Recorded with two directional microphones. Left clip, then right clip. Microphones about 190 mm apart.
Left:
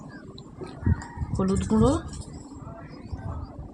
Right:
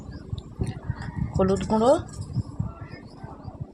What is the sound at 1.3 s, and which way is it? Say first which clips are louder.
Speech: right 3 dB; 70° right (ahead or behind).